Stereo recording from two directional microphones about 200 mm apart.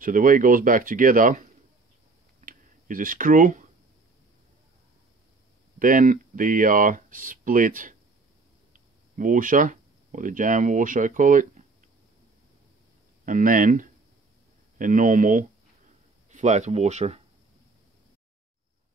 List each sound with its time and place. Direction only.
0.0 s speech: 45° right (ahead or behind)
2.4 s clicking: 45° right (ahead or behind)
5.8 s speech: 40° right (ahead or behind)
13.2 s speech: 40° right (ahead or behind)